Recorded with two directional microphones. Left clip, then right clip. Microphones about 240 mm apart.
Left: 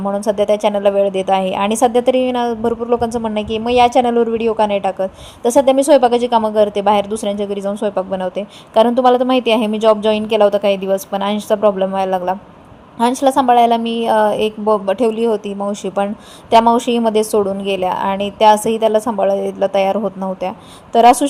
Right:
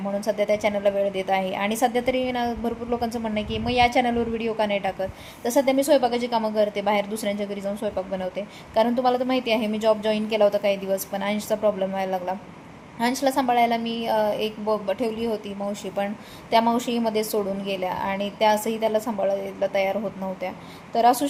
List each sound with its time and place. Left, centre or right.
0.3 s a woman's voice: left